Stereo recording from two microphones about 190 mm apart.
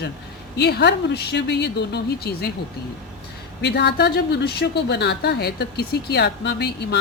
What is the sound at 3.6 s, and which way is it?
A woman's voice, 60° left (ahead or behind).